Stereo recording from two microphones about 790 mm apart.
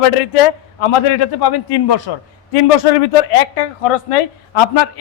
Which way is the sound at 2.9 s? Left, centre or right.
Left.